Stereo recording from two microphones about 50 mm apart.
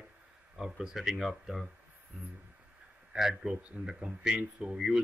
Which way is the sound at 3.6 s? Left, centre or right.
Right.